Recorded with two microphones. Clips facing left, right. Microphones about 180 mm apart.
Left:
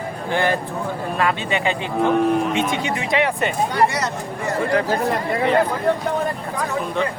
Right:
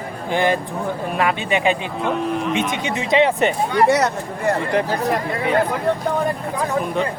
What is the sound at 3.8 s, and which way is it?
Speech, 65° right (ahead or behind).